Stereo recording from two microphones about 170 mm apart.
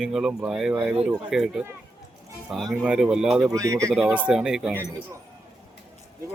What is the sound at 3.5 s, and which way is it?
Speech, 20° right (ahead or behind).